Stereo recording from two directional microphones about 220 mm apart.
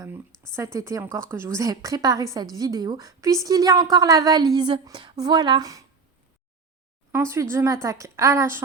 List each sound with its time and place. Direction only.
0.5 s a woman's voice: 15° right (ahead or behind)
7.1 s a woman's voice: 10° right (ahead or behind)